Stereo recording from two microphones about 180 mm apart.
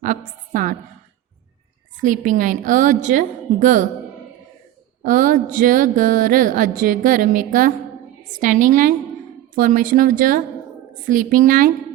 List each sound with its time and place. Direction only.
0.0 s a woman's voice: 45° right (ahead or behind)
2.0 s speech: 45° right (ahead or behind)
5.0 s speech: 50° right (ahead or behind)